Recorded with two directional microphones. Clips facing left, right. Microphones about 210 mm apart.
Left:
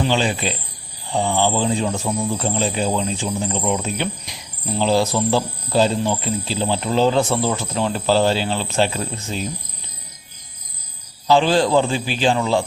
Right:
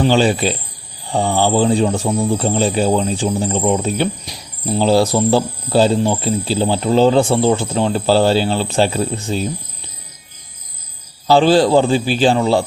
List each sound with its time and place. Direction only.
0.0 s speech: 40° right (ahead or behind)
11.3 s speech: 35° right (ahead or behind)